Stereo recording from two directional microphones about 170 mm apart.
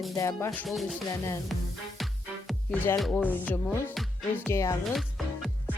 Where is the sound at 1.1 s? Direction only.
20° left (ahead or behind).